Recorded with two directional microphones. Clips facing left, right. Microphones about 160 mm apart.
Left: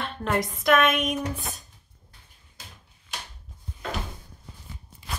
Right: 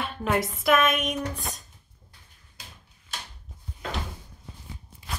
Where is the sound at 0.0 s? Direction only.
5° right (ahead or behind).